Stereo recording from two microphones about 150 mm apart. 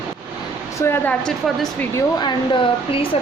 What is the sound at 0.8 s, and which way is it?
Speech, 15° left (ahead or behind).